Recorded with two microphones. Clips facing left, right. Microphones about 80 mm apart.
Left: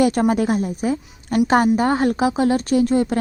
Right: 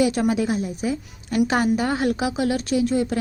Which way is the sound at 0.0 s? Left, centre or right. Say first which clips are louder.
Left 3 dB; left.